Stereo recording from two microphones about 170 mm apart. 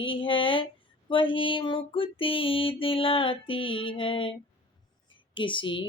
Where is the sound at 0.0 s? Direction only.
30° left (ahead or behind).